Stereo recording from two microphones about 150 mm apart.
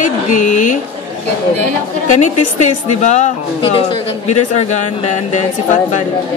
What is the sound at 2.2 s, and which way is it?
Speech, 50° left (ahead or behind).